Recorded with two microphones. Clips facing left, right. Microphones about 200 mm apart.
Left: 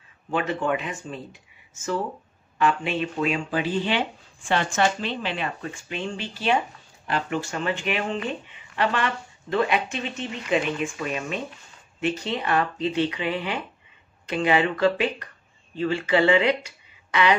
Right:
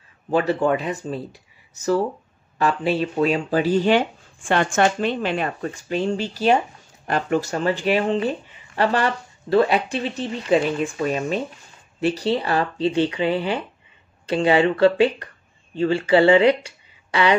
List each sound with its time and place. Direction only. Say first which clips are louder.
0.3 s speech: right 6 dB; 35° right (ahead or behind)